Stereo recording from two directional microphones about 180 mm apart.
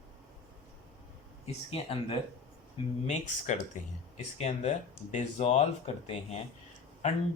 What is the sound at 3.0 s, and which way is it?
Speech, 40° left (ahead or behind).